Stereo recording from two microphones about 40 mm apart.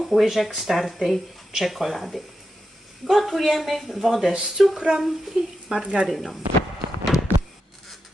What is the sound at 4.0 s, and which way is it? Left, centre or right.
A woman's voice, centre.